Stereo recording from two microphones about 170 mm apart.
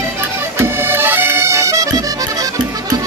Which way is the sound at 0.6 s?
15° right (ahead or behind).